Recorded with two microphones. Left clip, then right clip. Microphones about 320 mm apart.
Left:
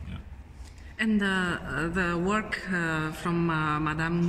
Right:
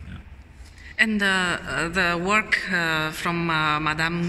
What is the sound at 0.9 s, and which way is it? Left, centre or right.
Speech, centre.